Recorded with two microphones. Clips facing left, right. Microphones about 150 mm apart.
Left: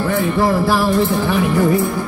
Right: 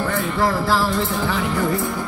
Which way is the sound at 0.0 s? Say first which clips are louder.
Left 5 dB; 5° left (ahead or behind).